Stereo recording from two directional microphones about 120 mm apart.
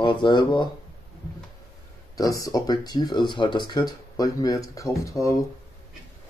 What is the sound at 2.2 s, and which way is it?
Speech, 30° left (ahead or behind).